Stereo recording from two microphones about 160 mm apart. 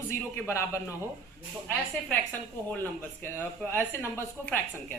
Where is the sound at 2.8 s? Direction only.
15° left (ahead or behind).